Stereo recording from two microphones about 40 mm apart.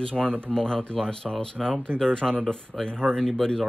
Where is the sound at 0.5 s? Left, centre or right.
Centre.